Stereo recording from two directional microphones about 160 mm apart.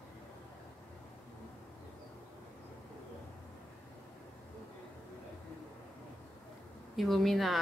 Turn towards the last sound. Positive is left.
turn(degrees=0)  # may be behind; listen again after turning